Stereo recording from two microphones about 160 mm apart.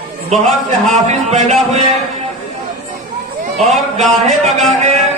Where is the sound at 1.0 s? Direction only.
45° right (ahead or behind).